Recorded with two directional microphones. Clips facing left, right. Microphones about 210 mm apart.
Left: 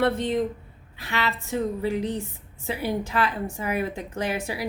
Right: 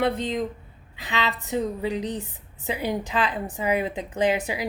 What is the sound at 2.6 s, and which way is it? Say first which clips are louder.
Speech: even; 15° right (ahead or behind).